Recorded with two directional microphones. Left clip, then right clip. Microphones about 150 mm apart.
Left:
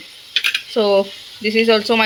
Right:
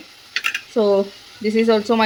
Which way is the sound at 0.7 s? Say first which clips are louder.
Left 1 dB; 10° right (ahead or behind).